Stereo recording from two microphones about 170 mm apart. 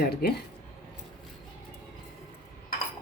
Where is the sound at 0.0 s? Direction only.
65° left (ahead or behind).